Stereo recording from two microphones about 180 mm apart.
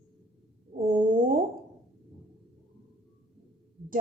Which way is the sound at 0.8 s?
30° right (ahead or behind).